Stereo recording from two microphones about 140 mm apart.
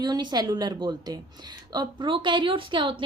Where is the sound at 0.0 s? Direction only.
30° right (ahead or behind).